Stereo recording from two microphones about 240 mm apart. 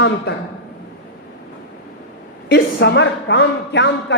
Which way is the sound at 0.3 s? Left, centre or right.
Left.